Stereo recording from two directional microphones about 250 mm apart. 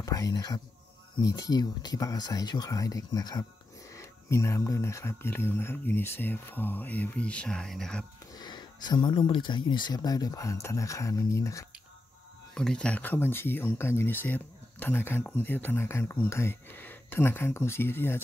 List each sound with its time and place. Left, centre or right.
0.0 s speech: centre
8.4 s speech: centre